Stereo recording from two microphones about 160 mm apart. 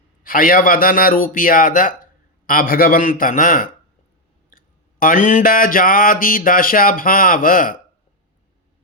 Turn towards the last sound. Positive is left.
turn(degrees=60)  # may be behind; listen again after turning